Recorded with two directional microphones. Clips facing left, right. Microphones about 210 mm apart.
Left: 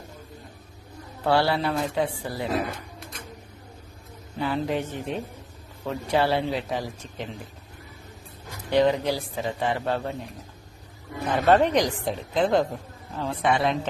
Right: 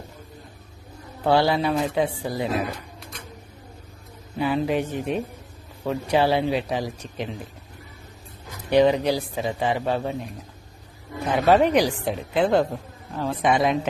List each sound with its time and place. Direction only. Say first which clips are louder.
1.2 s a woman's voice: right 3 dB; 20° right (ahead or behind)
4.4 s a woman's voice: right 4 dB; 15° right (ahead or behind)
8.7 s a woman's voice: right 3 dB; 15° right (ahead or behind)
11.4 s a woman's voice: right 2 dB; 10° right (ahead or behind)